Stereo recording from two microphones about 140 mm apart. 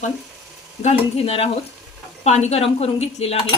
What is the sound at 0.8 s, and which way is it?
Speech, 50° left (ahead or behind).